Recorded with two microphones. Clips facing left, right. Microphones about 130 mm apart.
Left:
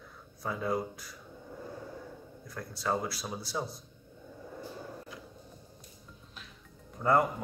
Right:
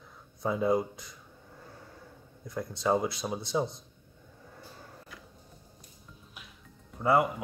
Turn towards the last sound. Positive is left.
turn(degrees=-10)  # may be behind; listen again after turning